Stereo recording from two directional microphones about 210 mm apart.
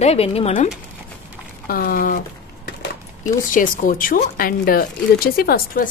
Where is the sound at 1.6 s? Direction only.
45° left (ahead or behind).